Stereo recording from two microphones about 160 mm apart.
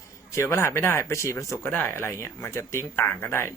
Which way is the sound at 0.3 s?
15° left (ahead or behind).